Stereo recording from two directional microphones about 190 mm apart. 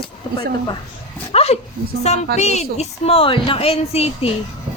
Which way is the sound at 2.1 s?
35° left (ahead or behind).